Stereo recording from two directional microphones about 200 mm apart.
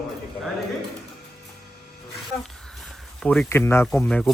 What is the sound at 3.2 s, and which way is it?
A man's voice, 5° left (ahead or behind).